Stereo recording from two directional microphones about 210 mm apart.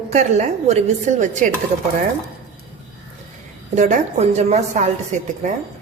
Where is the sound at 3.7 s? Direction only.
35° right (ahead or behind).